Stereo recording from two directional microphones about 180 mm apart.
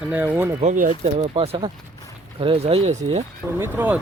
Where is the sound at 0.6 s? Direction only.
45° right (ahead or behind).